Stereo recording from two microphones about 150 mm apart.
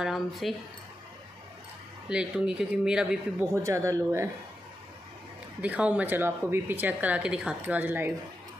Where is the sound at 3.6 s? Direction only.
20° right (ahead or behind).